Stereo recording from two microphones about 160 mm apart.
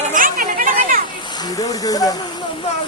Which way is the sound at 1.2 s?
25° left (ahead or behind).